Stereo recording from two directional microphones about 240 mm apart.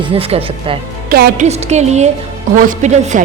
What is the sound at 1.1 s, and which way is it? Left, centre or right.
A woman's voice, right.